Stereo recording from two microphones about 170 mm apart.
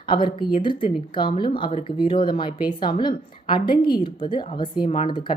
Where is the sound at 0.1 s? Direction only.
30° left (ahead or behind).